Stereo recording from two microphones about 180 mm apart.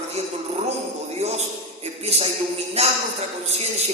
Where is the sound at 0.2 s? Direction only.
35° right (ahead or behind).